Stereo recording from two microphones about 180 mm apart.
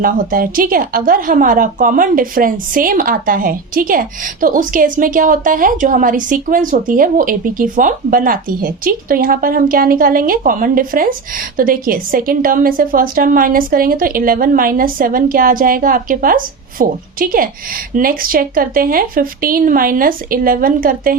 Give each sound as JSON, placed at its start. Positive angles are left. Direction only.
{"t": 0.0, "sound": "a woman's voice", "side_deg": -50}